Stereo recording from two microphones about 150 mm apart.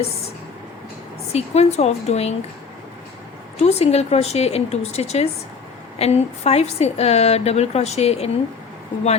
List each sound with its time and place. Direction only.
1.3 s a woman's voice: 45° left (ahead or behind)
3.6 s a woman's voice: 45° left (ahead or behind)